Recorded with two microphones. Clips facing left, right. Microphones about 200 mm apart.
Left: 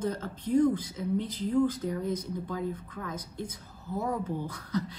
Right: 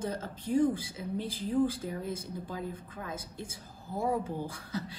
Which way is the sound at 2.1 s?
25° right (ahead or behind).